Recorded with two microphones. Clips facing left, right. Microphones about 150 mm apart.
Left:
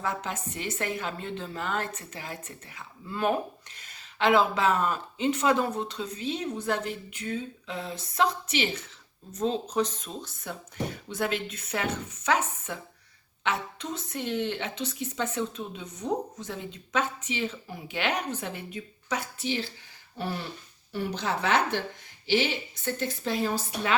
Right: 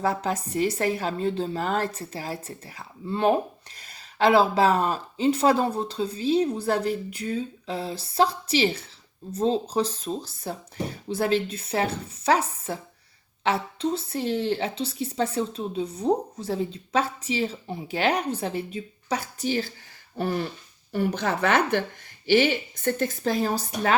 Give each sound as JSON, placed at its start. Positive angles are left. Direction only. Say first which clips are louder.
{"t": 0.0, "sound": "a woman's voice", "louder": "right 6 dB", "side_deg": -35}